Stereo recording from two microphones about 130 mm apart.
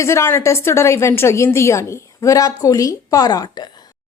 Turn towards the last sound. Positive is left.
turn(degrees=35)  # may be behind; listen again after turning